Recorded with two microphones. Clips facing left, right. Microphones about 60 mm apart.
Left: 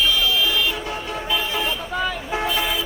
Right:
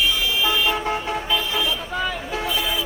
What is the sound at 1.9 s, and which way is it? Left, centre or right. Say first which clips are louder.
Toot: left 1 dB; centre.